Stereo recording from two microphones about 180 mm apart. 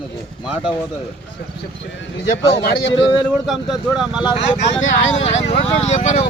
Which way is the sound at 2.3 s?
80° left.